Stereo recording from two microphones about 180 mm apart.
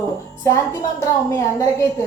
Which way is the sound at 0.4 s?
15° left (ahead or behind).